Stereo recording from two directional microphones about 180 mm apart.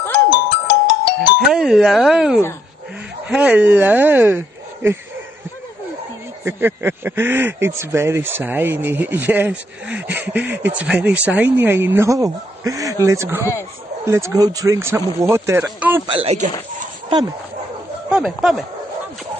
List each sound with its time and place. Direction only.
0.3 s music: 70° left (ahead or behind)
1.5 s speech: centre (ahead or behind)
6.4 s speech: 10° right (ahead or behind)
16.1 s speech: 35° right (ahead or behind)
18.1 s speech: centre (ahead or behind)